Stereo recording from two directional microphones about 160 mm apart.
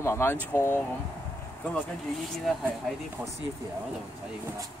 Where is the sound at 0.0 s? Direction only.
15° left (ahead or behind).